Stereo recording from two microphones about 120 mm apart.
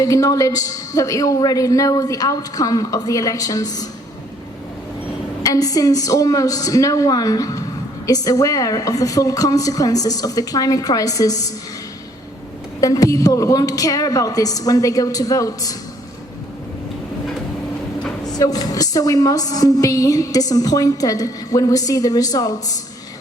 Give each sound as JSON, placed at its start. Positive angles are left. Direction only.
{"t": 0.0, "sound": "a woman's voice", "side_deg": 30}
{"t": 5.5, "sound": "a woman's voice", "side_deg": 30}
{"t": 12.8, "sound": "a woman's voice", "side_deg": 30}
{"t": 18.3, "sound": "a woman's voice", "side_deg": 30}